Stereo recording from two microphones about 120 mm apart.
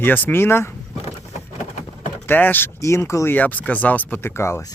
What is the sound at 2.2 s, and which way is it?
Speech, 15° left (ahead or behind).